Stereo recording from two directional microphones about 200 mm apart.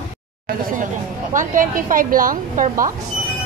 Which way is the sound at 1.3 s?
40° right (ahead or behind).